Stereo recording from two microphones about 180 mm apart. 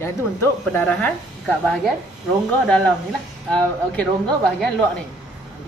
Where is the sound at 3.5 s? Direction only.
5° left (ahead or behind).